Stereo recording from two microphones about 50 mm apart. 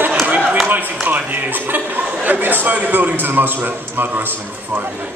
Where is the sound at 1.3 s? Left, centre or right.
Right.